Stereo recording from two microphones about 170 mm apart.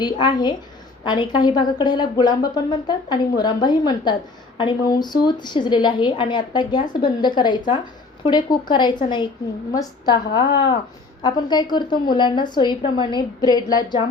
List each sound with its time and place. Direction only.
0.0 s a woman's voice: 25° left (ahead or behind)